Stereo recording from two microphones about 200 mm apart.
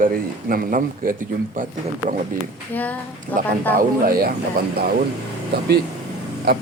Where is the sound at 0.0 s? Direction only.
45° right (ahead or behind).